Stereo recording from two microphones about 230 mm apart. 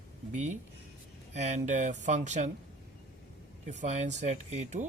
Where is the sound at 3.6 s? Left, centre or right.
Right.